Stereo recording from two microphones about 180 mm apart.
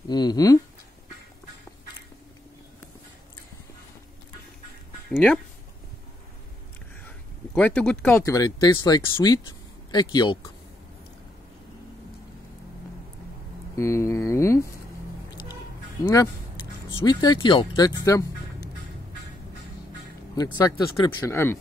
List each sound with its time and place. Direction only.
0.1 s speech: 20° left (ahead or behind)
5.1 s speech: 5° left (ahead or behind)
7.1 s a sound: 5° left (ahead or behind)
8.2 s speech: 20° left (ahead or behind)
13.7 s speech: 15° left (ahead or behind)
16.0 s speech: 20° left (ahead or behind)
20.5 s speech: 20° left (ahead or behind)